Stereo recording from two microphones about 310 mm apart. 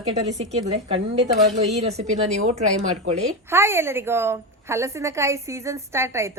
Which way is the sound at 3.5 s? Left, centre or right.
Centre.